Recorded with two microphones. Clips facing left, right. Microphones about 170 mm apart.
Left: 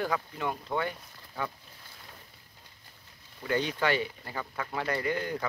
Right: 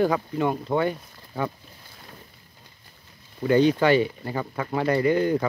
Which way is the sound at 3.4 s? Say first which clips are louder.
Right 10 dB; 25° right (ahead or behind).